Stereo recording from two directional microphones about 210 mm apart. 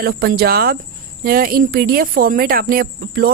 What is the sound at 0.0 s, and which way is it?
Speech, 45° right (ahead or behind).